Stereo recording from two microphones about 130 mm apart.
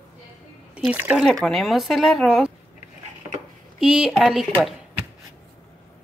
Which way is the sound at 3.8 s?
5° right (ahead or behind).